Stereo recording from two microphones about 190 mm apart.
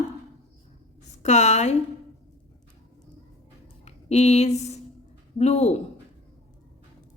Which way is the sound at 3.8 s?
35° left (ahead or behind).